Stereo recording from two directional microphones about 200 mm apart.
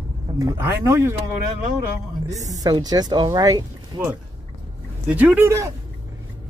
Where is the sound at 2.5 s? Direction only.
20° right (ahead or behind).